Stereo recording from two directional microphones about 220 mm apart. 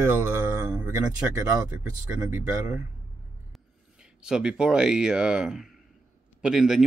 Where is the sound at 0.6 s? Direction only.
15° right (ahead or behind).